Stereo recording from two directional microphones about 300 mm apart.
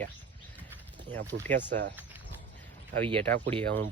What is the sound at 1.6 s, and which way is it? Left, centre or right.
Speech, right.